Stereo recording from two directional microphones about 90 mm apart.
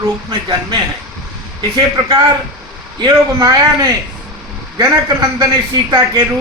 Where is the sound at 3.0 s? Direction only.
45° right (ahead or behind).